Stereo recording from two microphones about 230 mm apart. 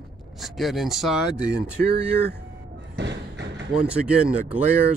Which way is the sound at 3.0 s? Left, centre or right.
Right.